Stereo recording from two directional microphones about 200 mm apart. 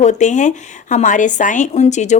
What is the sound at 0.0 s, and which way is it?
A woman's voice, 35° left (ahead or behind).